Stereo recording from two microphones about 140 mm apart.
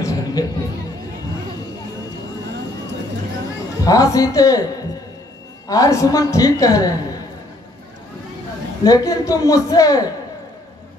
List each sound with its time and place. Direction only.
0.0 s music: 25° left (ahead or behind)
3.8 s a woman's voice: 25° left (ahead or behind)
8.8 s a woman's voice: 25° left (ahead or behind)